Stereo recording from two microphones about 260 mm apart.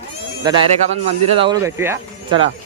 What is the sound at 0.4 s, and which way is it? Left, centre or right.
Speech, centre.